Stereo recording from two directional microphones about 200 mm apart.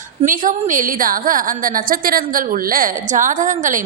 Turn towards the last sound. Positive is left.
turn(degrees=-40)  # may be behind; listen again after turning